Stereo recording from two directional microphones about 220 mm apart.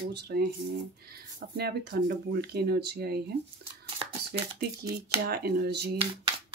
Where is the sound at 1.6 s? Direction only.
45° right (ahead or behind).